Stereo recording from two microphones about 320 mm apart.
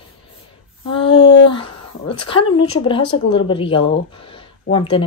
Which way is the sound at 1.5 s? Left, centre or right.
Centre.